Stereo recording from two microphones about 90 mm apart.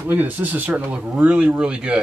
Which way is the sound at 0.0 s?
20° right (ahead or behind).